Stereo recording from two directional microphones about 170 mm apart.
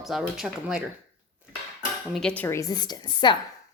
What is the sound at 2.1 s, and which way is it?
Speech, 5° left (ahead or behind).